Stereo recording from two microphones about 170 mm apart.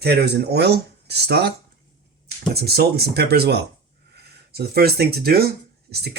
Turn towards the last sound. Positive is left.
turn(degrees=-70)  # may be behind; listen again after turning